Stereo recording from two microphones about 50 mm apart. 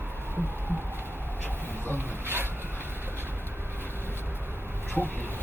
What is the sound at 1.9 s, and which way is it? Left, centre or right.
Speech, right.